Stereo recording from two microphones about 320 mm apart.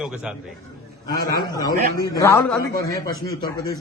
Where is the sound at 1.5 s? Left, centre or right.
Centre.